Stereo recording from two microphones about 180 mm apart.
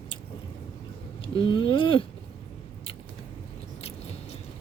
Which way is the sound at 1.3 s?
30° left (ahead or behind).